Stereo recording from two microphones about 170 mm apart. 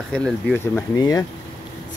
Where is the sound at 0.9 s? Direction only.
20° left (ahead or behind).